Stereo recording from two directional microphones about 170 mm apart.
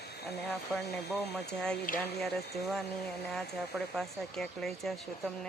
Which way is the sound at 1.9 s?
55° left (ahead or behind).